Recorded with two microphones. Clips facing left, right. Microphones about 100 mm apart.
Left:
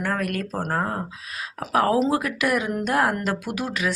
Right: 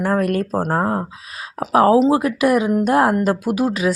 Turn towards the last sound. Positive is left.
turn(degrees=-35)  # may be behind; listen again after turning